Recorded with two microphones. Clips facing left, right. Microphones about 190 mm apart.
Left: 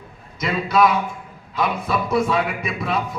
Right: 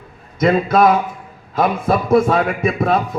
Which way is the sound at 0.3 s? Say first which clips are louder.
Right 6 dB; 50° right (ahead or behind).